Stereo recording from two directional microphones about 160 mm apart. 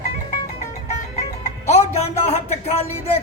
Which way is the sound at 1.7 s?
40° left (ahead or behind).